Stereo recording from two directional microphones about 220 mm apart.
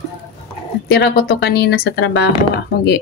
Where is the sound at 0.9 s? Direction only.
45° left (ahead or behind).